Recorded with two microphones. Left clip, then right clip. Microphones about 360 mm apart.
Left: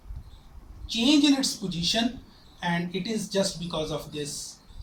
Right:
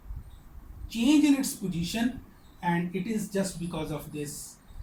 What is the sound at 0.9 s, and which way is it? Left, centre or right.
Speech, left.